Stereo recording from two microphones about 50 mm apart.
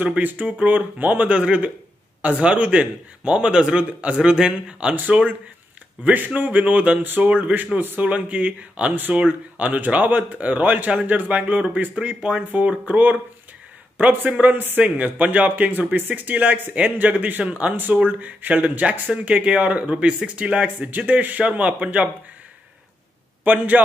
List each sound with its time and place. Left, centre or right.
0.2 s a man's voice: right; by 4.9 s centre
4.9 s a man's voice: right
7.5 s a man's voice: right; by 12.4 s centre
12.6 s speech: right
14.4 s speech: right
14.8 s a man's voice: right
20.6 s speech: right
21.5 s a man's voice: right
23.4 s speech: right